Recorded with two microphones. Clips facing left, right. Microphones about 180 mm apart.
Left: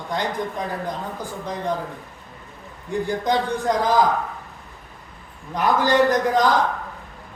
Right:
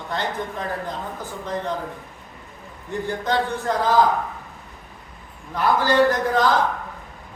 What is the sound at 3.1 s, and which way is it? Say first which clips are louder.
Speech: left 1 dB; 15° left (ahead or behind).